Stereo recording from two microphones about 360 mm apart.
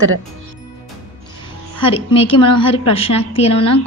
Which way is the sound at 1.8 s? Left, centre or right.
Centre.